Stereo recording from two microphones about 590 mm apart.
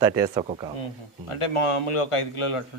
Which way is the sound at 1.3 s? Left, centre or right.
Left.